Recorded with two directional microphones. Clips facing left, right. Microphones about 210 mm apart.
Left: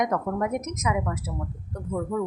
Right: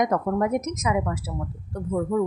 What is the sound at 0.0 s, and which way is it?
A woman's voice, 35° right (ahead or behind).